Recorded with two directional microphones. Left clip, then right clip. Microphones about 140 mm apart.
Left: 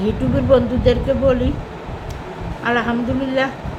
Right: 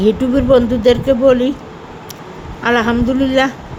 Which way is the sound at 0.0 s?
90° right.